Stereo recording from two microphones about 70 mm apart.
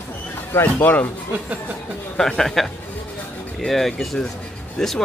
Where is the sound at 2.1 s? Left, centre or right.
Centre.